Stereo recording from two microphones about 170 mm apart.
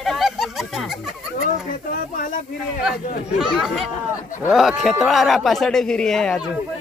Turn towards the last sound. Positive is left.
turn(degrees=5)  # may be behind; listen again after turning